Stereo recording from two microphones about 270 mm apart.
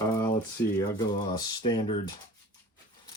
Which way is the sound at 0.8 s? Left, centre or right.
Centre.